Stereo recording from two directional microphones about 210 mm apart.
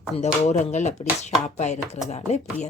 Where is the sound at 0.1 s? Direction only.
25° left (ahead or behind).